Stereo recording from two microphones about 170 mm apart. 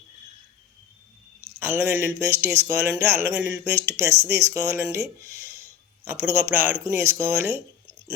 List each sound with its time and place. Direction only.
1.5 s speech: 15° right (ahead or behind)
5.2 s a sound: 15° right (ahead or behind)
6.1 s speech: 15° right (ahead or behind)